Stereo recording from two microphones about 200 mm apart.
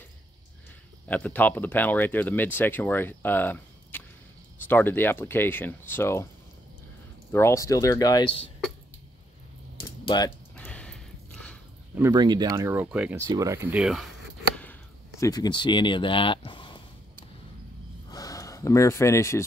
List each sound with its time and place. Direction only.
1.0 s speech: 5° left (ahead or behind)
7.3 s speech: 15° left (ahead or behind)
9.8 s typing: 20° left (ahead or behind)
10.5 s a sound: 5° left (ahead or behind)
12.0 s speech: 20° right (ahead or behind); by 14.0 s 5° right (ahead or behind)
14.6 s a sound: 10° left (ahead or behind)
18.1 s gasp: 15° left (ahead or behind)